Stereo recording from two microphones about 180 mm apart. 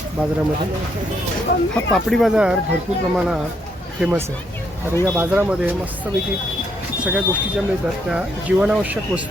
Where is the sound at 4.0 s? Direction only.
5° right (ahead or behind).